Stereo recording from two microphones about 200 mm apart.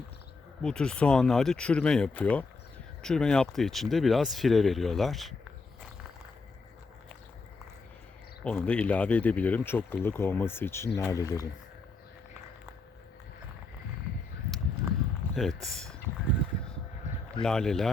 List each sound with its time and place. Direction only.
0.6 s speech: 5° left (ahead or behind)
8.4 s speech: 5° left (ahead or behind)
15.2 s a sound: 10° left (ahead or behind)
17.4 s speech: 5° left (ahead or behind)